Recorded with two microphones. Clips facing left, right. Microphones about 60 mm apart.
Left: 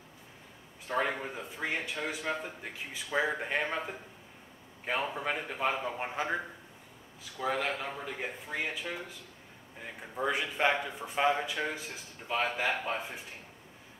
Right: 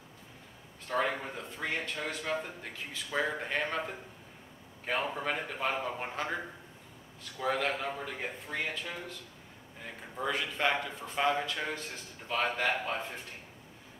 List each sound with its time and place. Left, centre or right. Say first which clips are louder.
0.8 s a man's voice: even; centre
5.1 s speech: even; centre
7.3 s speech: right 1 dB; centre
10.1 s speech: left 2 dB; centre